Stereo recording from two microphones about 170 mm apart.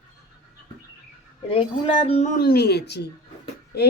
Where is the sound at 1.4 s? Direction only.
35° left (ahead or behind).